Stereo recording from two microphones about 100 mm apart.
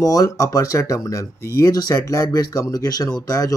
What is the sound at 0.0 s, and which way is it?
Speech, 35° left (ahead or behind).